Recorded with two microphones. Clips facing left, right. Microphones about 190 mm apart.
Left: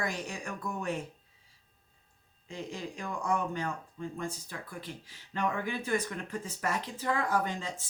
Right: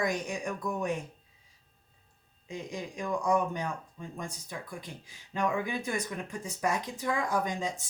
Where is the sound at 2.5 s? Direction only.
15° right (ahead or behind).